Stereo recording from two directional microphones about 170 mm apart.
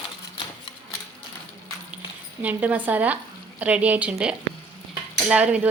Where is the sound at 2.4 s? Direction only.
10° right (ahead or behind).